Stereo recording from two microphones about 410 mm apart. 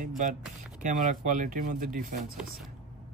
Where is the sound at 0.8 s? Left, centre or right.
Centre.